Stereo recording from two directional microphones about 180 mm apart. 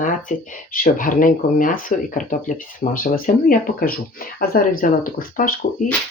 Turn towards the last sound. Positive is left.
turn(degrees=50)  # may be behind; listen again after turning